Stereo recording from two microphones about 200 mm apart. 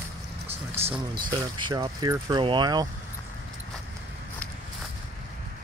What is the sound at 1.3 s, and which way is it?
Speech, 25° right (ahead or behind).